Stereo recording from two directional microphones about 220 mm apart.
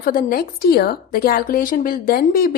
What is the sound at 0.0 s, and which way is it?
Speech, 40° left (ahead or behind).